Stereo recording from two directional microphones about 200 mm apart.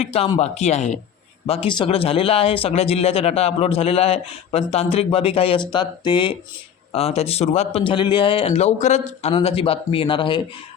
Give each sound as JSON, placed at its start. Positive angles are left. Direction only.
{"t": 0.0, "sound": "speech", "side_deg": 30}